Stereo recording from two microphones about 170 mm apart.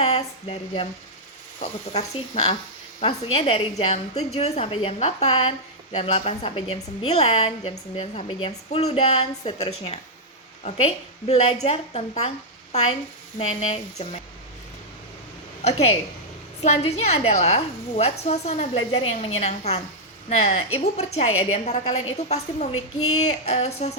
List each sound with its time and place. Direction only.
0.0 s a woman's voice: 35° left (ahead or behind)
13.4 s a woman's voice: 35° left (ahead or behind)
15.6 s a woman's voice: 35° left (ahead or behind)